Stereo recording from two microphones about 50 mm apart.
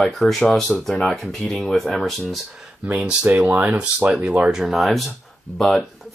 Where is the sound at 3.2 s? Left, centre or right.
Right.